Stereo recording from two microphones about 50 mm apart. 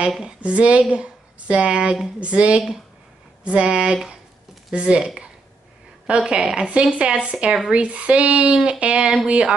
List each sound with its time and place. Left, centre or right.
0.4 s speech: right